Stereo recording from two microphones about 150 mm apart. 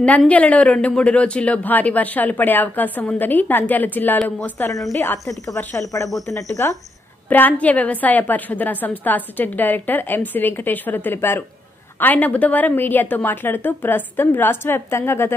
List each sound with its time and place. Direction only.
0.0 s a woman's voice: 10° left (ahead or behind)
7.2 s a woman's voice: 10° left (ahead or behind)